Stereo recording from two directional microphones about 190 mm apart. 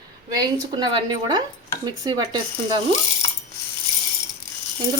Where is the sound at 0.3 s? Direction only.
20° right (ahead or behind).